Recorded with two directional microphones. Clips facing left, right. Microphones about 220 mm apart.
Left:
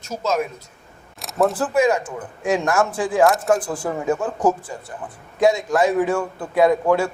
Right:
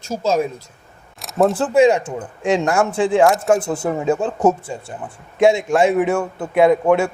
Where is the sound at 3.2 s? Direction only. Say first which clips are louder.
Right 2 dB; centre (ahead or behind).